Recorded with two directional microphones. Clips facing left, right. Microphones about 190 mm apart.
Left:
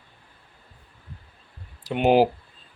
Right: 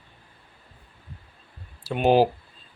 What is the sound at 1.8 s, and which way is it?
Speech, 15° left (ahead or behind).